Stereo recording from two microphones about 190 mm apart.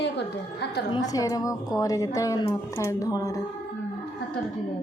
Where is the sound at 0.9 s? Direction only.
20° left (ahead or behind).